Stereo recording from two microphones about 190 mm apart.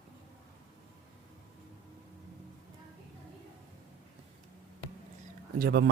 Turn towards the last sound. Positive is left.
turn(degrees=-55)  # may be behind; listen again after turning